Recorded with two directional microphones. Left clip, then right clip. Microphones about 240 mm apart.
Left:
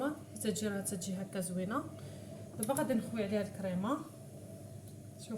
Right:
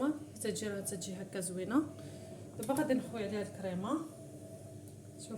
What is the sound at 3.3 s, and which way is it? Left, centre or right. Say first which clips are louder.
Speech: left 2 dB; centre.